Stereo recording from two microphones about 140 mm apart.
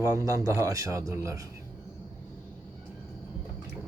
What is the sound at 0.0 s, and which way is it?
A man's voice, 25° right (ahead or behind).